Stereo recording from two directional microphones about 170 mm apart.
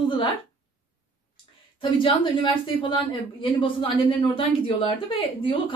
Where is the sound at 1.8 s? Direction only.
30° left (ahead or behind).